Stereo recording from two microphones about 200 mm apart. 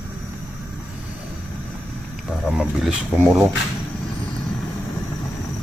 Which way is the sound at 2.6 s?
Centre (ahead or behind).